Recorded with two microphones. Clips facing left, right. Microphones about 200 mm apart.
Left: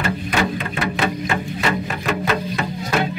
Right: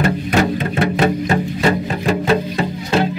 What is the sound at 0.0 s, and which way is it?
Music, 40° right (ahead or behind).